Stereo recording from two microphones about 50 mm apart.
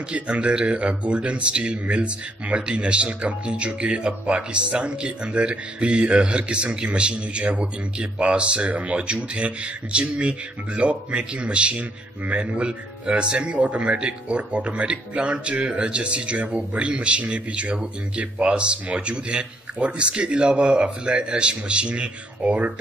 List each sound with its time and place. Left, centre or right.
0.1 s speech: right